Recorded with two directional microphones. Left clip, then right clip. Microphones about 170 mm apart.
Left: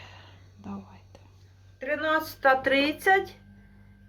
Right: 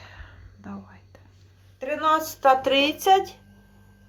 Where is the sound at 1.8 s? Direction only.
45° right (ahead or behind).